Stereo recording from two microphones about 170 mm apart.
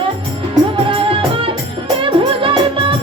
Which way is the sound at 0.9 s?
30° right (ahead or behind).